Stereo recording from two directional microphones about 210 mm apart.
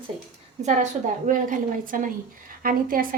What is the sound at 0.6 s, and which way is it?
A woman's voice, 35° right (ahead or behind).